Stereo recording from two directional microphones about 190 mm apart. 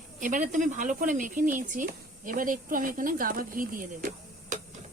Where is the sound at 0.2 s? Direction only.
40° right (ahead or behind).